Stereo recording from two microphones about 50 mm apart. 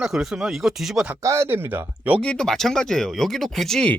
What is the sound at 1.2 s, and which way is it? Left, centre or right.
Speech, right.